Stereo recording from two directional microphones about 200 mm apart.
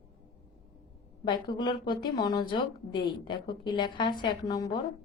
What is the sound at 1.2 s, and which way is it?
A woman's voice, 20° left (ahead or behind).